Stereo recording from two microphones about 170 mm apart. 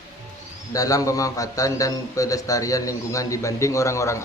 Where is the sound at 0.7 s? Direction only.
20° left (ahead or behind).